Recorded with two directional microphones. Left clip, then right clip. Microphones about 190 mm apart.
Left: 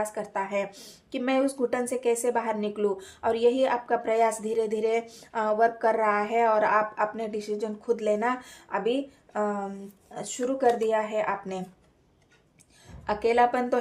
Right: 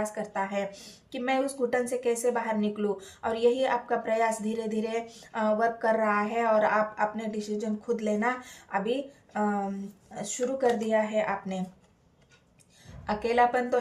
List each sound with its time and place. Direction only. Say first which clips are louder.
0.0 s speech: left 1 dB; 40° left (ahead or behind)
13.1 s speech: left 2 dB; 40° left (ahead or behind)